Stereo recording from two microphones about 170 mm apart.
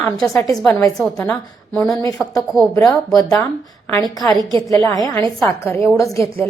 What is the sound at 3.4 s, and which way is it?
A woman's voice, 15° left (ahead or behind).